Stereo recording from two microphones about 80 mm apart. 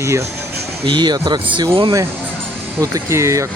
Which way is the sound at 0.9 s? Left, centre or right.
Right.